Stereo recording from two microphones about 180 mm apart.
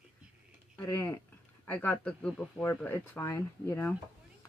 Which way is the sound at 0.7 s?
15° left (ahead or behind).